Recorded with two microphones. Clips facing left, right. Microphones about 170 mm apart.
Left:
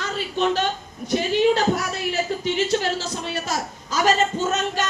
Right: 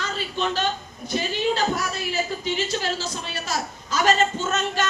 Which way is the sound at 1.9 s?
65° left (ahead or behind).